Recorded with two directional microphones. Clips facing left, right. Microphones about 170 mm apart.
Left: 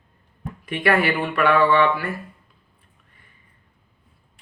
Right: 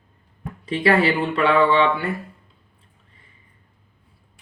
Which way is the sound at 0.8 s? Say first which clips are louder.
Right 2 dB; 25° right (ahead or behind).